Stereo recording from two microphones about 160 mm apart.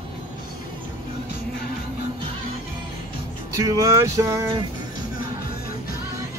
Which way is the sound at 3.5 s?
20° right (ahead or behind).